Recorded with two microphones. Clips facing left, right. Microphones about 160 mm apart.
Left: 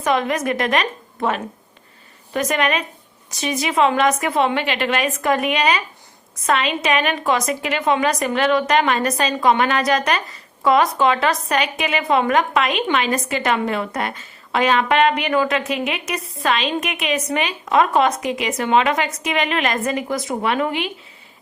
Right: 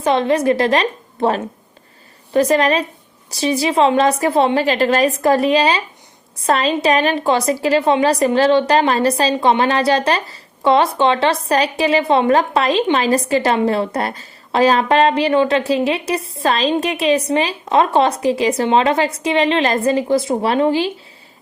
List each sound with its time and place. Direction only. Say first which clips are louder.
0.0 s a woman's voice: right 5 dB; 30° right (ahead or behind)